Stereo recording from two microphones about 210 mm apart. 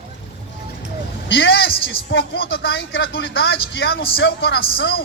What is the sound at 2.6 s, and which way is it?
A woman's voice, 65° left (ahead or behind).